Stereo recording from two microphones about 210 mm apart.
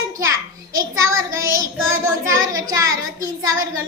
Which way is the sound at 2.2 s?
70° right (ahead or behind).